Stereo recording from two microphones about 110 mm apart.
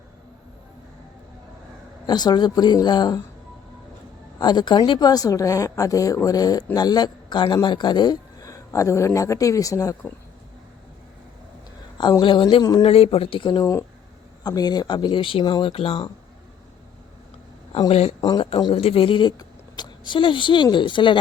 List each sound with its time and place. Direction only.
2.0 s a woman's voice: 40° left (ahead or behind)
4.4 s a woman's voice: 40° left (ahead or behind)
12.2 s speech: 50° left (ahead or behind)
12.8 s speech: 60° left (ahead or behind)
13.6 s a woman's voice: 25° left (ahead or behind); by 15.7 s 45° left (ahead or behind)
15.7 s speech: 60° left (ahead or behind)
17.8 s speech: 70° left (ahead or behind)
18.2 s speech: 40° left (ahead or behind)